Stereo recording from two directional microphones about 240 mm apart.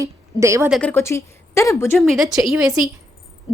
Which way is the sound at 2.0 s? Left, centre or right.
Centre.